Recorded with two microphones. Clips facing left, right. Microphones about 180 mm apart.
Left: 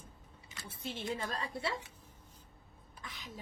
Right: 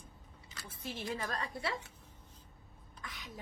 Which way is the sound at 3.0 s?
25° left (ahead or behind).